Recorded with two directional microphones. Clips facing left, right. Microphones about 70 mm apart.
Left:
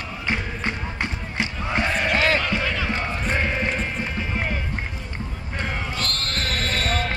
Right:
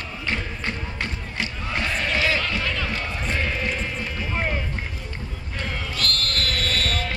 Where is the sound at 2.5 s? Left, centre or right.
Centre.